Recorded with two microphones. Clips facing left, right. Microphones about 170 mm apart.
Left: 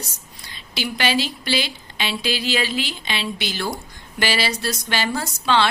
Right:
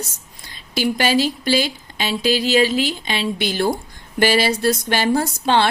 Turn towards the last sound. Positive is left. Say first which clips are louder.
# right 3 dB
turn(degrees=-50)  # may be behind; listen again after turning